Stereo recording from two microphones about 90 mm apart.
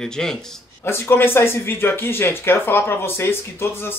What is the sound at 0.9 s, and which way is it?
Speech, 25° left (ahead or behind).